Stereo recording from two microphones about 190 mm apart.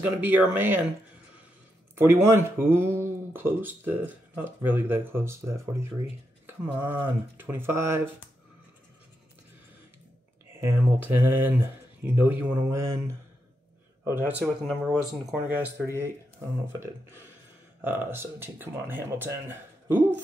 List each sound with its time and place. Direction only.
0.0 s speech: 10° right (ahead or behind)
2.0 s speech: 15° right (ahead or behind)
10.6 s speech: 10° right (ahead or behind)